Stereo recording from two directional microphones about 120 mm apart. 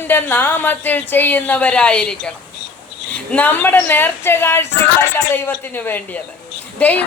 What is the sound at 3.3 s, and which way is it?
A woman's voice, 15° left (ahead or behind).